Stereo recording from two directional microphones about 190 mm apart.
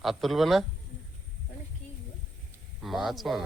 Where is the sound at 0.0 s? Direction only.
Centre (ahead or behind).